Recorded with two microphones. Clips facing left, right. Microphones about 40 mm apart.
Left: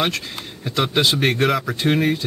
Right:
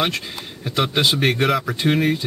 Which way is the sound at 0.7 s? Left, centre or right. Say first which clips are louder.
Even; centre.